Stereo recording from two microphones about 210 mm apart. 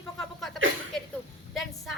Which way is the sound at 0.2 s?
Centre (ahead or behind).